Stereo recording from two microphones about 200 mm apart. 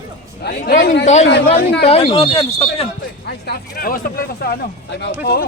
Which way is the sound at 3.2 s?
50° left (ahead or behind).